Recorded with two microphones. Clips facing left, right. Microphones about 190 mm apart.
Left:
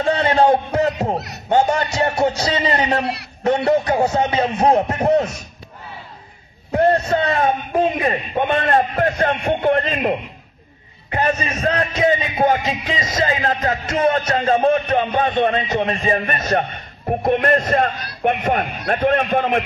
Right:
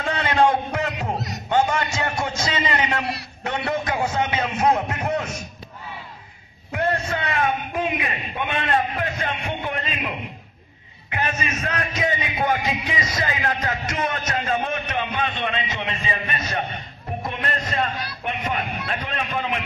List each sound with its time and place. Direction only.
0.0 s a sound: 35° left (ahead or behind)
1.1 s a sound: 65° left (ahead or behind)
1.5 s a man's voice: 35° left (ahead or behind)
6.7 s a man's voice: 35° left (ahead or behind)
11.1 s a man's voice: 35° left (ahead or behind)
13.8 s a man's voice: 30° left (ahead or behind); by 19.6 s 55° left (ahead or behind)